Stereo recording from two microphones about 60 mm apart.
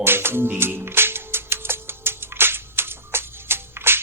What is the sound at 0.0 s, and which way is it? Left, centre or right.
Speech, right.